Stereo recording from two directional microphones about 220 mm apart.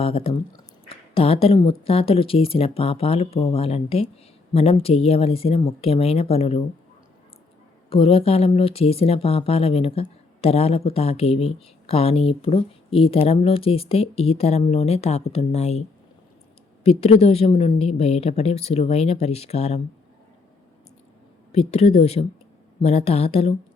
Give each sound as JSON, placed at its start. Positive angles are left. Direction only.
{"t": 0.0, "sound": "speech", "side_deg": 25}
{"t": 7.9, "sound": "speech", "side_deg": 25}
{"t": 16.8, "sound": "speech", "side_deg": 30}
{"t": 21.7, "sound": "speech", "side_deg": 30}